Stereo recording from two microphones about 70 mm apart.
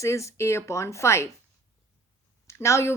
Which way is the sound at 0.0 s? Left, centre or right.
Left.